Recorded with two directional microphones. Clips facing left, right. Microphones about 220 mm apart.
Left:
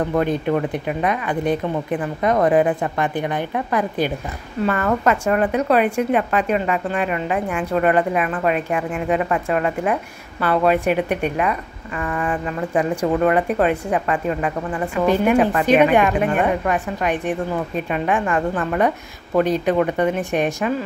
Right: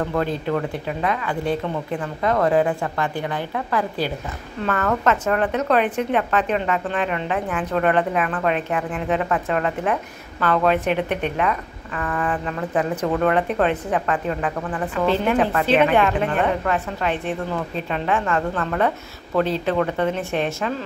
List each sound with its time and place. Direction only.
0.0 s speech: 20° left (ahead or behind)